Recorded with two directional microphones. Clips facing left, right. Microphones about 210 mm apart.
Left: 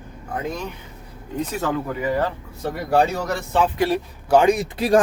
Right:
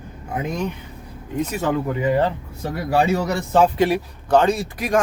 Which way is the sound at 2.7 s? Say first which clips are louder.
Right 1 dB; 5° right (ahead or behind).